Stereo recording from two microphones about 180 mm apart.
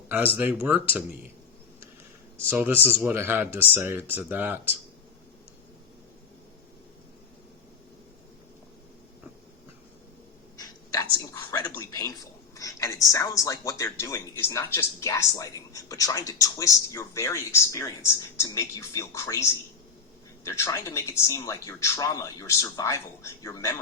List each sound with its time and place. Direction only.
0.1 s speech: 10° right (ahead or behind)
2.4 s speech: 10° right (ahead or behind)
11.6 s a sound: 15° left (ahead or behind)
13.1 s speech: 20° left (ahead or behind)